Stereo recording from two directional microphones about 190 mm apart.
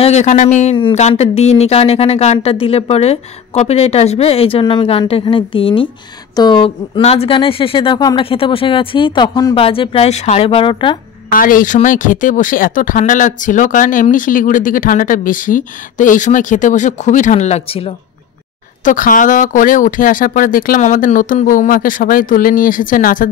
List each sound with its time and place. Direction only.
0.0 s a woman's voice: 35° left (ahead or behind)
11.3 s speech: 45° left (ahead or behind); by 17.9 s 30° left (ahead or behind)
18.9 s speech: 45° left (ahead or behind)